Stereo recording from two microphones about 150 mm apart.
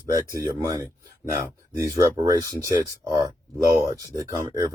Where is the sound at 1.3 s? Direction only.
20° right (ahead or behind).